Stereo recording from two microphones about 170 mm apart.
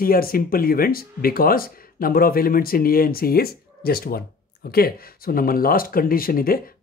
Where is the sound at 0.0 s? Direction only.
60° left (ahead or behind).